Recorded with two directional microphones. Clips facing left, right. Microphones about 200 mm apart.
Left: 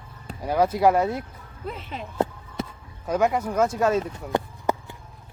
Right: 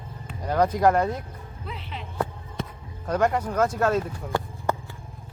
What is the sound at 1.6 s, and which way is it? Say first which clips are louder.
Speech: left 5 dB; 45° left (ahead or behind).